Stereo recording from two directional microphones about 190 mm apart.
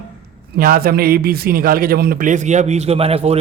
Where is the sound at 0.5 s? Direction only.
50° right (ahead or behind).